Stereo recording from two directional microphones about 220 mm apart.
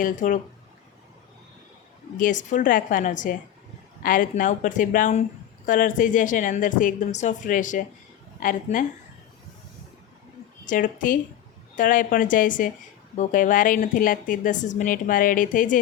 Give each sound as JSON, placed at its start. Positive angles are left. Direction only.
{"t": 0.0, "sound": "a woman's voice", "side_deg": 35}
{"t": 2.1, "sound": "a woman's voice", "side_deg": 35}
{"t": 10.7, "sound": "a woman's voice", "side_deg": 35}